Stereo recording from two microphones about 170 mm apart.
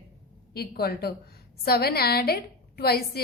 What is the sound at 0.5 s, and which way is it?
A woman's voice, 65° left (ahead or behind).